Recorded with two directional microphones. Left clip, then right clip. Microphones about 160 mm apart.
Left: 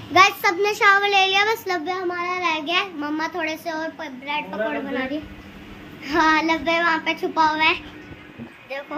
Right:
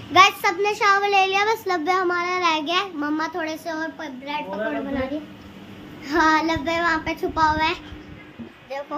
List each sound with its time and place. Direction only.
0.1 s a child's voice: centre (ahead or behind)
0.9 s a child's voice: 10° right (ahead or behind)
1.9 s a child's voice: 35° right (ahead or behind); by 5.0 s centre (ahead or behind)
6.0 s speech: 10° right (ahead or behind)